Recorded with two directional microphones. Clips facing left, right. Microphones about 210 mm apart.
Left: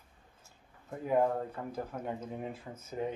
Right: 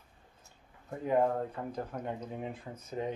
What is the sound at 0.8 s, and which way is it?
Speech, 5° left (ahead or behind).